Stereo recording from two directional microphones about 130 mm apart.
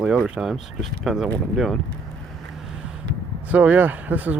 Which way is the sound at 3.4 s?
10° right (ahead or behind).